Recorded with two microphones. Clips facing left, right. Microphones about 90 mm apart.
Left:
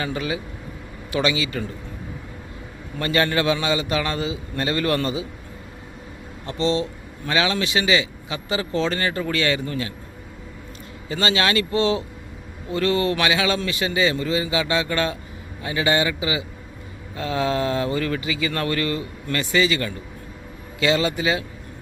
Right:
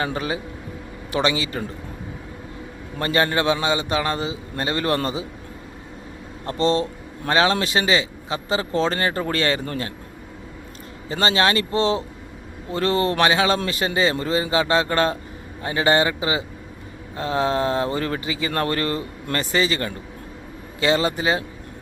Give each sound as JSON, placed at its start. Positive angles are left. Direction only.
{"t": 0.0, "sound": "speech", "side_deg": -35}
{"t": 3.0, "sound": "a man's voice", "side_deg": -30}
{"t": 6.4, "sound": "speech", "side_deg": -40}
{"t": 11.1, "sound": "speech", "side_deg": -35}